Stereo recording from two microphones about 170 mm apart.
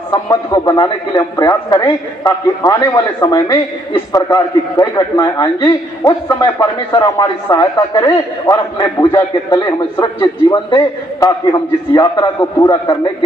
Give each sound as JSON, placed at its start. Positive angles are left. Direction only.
{"t": 0.1, "sound": "a man's voice", "side_deg": 20}